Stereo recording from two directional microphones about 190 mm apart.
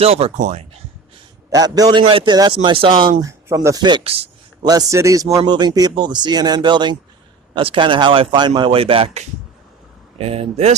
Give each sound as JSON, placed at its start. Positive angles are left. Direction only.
{"t": 0.0, "sound": "speech", "side_deg": -30}
{"t": 1.5, "sound": "speech", "side_deg": -20}
{"t": 4.7, "sound": "speech", "side_deg": -20}